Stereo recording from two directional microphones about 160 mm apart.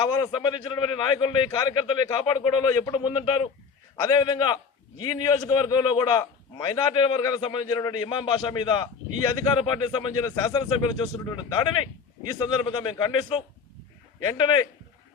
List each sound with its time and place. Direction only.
0.0 s a man's voice: 25° left (ahead or behind)